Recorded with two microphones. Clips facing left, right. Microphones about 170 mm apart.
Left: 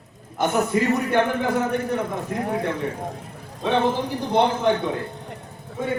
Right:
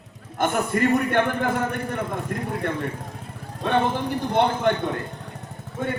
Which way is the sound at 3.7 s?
55° right (ahead or behind).